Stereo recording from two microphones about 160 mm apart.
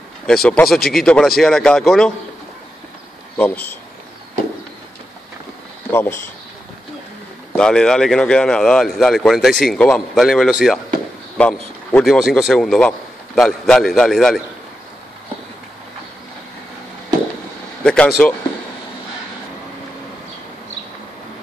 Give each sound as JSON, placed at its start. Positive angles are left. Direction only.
{"t": 0.3, "sound": "speech", "side_deg": 5}
{"t": 3.3, "sound": "speech", "side_deg": 10}
{"t": 5.9, "sound": "a sound", "side_deg": 15}
{"t": 7.5, "sound": "a man's voice", "side_deg": 5}
{"t": 17.8, "sound": "speech", "side_deg": 5}